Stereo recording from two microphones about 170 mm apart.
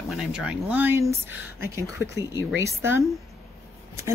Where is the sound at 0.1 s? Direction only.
5° right (ahead or behind).